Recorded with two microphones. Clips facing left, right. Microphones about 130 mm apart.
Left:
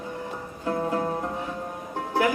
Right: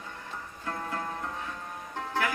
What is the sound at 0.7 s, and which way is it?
Music, 20° left (ahead or behind).